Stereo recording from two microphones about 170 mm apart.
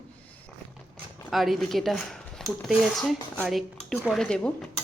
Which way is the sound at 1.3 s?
Centre (ahead or behind).